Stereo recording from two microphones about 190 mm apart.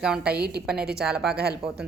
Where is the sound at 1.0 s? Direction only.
5° right (ahead or behind).